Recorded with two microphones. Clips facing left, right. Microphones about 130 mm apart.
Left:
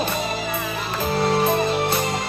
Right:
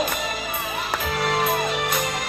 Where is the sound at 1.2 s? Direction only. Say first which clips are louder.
Left 4 dB; 30° left (ahead or behind).